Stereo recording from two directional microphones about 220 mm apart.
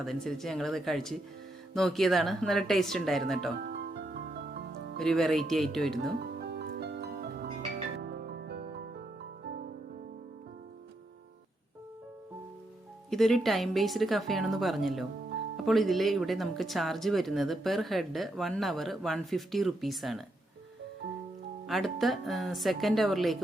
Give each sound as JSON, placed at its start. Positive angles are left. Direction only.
{"t": 0.0, "sound": "speech", "side_deg": 0}
{"t": 3.6, "sound": "music", "side_deg": -45}
{"t": 4.9, "sound": "speech", "side_deg": 0}
{"t": 6.1, "sound": "music", "side_deg": -50}
{"t": 13.1, "sound": "speech", "side_deg": 0}
{"t": 21.7, "sound": "speech", "side_deg": 0}